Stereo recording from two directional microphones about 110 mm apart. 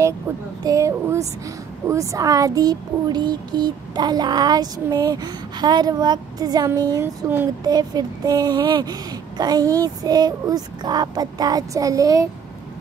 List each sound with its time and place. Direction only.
0.7 s speech: 30° right (ahead or behind)